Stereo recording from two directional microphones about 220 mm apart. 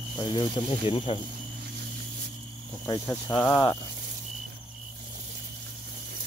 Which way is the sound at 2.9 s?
15° left (ahead or behind).